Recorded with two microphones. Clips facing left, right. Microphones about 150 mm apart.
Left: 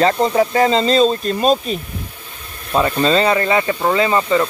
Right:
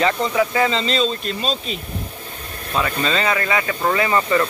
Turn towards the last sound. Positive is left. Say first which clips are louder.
# left 3 dB
turn(degrees=20)  # may be behind; listen again after turning